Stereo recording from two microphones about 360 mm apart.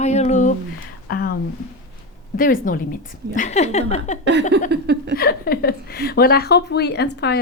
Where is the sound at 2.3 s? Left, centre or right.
Left.